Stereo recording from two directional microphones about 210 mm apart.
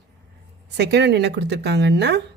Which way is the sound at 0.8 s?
50° right (ahead or behind).